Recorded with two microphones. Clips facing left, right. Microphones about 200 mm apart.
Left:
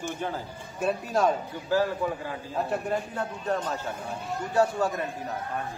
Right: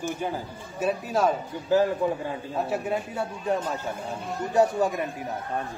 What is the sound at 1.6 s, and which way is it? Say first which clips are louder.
Speech: right 4 dB; 20° right (ahead or behind).